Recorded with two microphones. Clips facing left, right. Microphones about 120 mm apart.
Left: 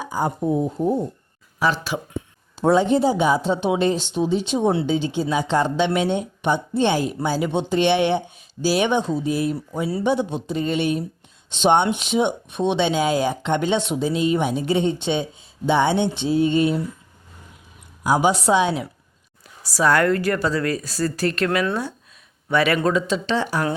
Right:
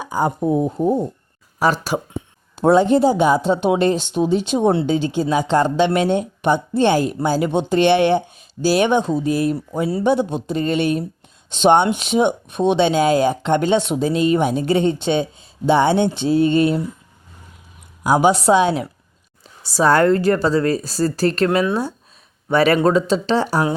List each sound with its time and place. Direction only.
0.1 s speech: 65° right (ahead or behind)
1.5 s speech: 45° right (ahead or behind)
10.0 s speech: 45° right (ahead or behind)
14.0 s speech: 60° right (ahead or behind)
18.0 s speech: 55° right (ahead or behind)
19.6 s speech: 30° right (ahead or behind)